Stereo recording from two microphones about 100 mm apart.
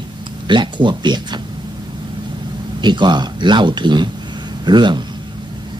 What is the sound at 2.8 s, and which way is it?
Speech, 50° right (ahead or behind).